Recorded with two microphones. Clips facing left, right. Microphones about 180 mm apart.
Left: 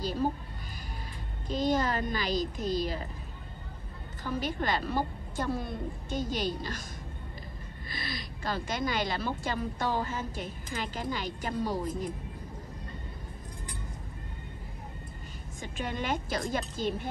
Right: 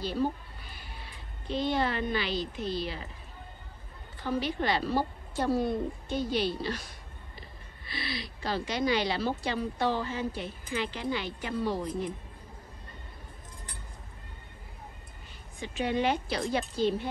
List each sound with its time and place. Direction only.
0.0 s a woman's voice: 40° left (ahead or behind)
1.5 s a woman's voice: 40° left (ahead or behind)
4.4 s a woman's voice: 45° left (ahead or behind)
7.9 s a woman's voice: 45° left (ahead or behind)
15.6 s a woman's voice: 45° left (ahead or behind)